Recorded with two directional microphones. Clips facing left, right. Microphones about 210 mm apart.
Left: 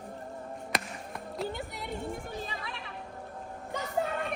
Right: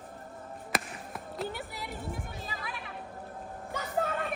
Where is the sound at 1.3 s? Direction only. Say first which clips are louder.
Left 1 dB; 5° right (ahead or behind).